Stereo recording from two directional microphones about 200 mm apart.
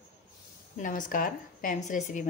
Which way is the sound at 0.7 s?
40° left (ahead or behind).